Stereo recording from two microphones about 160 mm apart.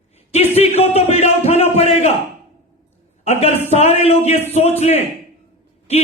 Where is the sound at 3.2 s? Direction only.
40° left (ahead or behind).